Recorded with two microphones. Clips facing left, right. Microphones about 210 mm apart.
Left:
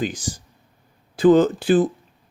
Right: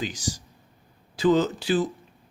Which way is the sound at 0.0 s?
55° left (ahead or behind).